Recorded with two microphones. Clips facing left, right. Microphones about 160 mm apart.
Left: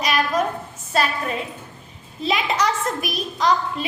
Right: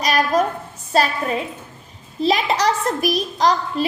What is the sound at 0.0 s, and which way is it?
A woman's voice, 40° right (ahead or behind).